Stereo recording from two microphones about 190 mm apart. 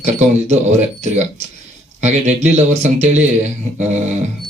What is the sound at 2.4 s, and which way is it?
Speech, 35° right (ahead or behind).